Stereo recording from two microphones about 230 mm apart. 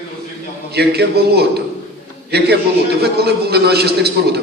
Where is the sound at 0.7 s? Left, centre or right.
Right.